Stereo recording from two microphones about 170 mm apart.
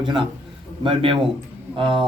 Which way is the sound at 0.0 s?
30° right (ahead or behind).